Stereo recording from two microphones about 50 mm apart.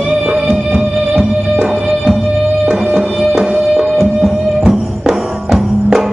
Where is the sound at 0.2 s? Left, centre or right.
Right.